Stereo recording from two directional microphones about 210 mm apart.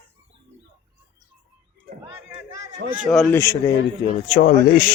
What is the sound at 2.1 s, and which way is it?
Speech, 10° right (ahead or behind).